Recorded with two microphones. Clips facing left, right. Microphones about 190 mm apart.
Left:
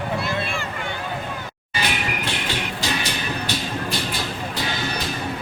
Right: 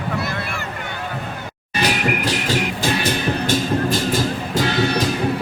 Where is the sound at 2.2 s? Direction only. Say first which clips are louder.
Right 6 dB; 45° right (ahead or behind).